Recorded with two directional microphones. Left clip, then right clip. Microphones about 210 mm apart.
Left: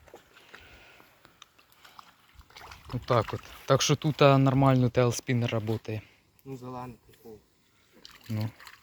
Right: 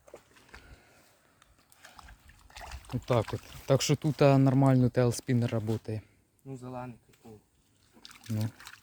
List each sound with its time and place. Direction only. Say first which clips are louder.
2.5 s trickle: even; 15° right (ahead or behind)
3.2 s speech: left 2 dB; centre (ahead or behind)
3.7 s speech: left 3 dB; 15° right (ahead or behind)
6.5 s speech: left 2 dB; 25° right (ahead or behind)
8.0 s rowboat: left 1 dB; 10° right (ahead or behind)
8.3 s speech: left 1 dB; 10° right (ahead or behind)